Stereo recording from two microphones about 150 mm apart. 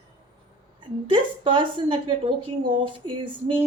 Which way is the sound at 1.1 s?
35° right (ahead or behind).